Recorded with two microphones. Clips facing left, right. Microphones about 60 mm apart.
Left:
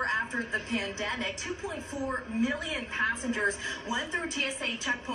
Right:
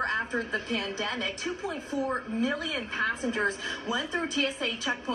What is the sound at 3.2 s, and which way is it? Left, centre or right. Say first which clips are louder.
A woman's voice: right 1 dB; right.